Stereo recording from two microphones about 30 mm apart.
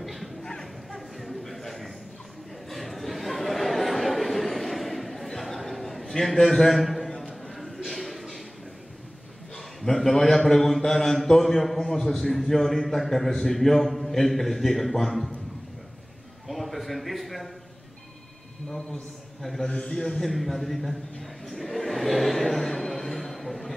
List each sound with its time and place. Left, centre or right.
0.0 s bow-wow: centre
0.4 s bow-wow: left
0.9 s a sound: centre
5.4 s chatter: centre
6.3 s a man's voice: centre
6.8 s a sound: centre
9.6 s a man's voice: centre
16.4 s a man's voice: centre
19.9 s a man's voice: left
20.2 s a man's voice: centre